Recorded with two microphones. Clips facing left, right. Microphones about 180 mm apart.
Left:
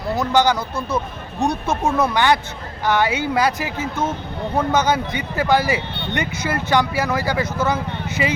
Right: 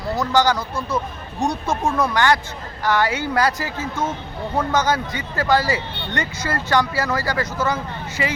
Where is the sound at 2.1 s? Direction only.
15° left (ahead or behind).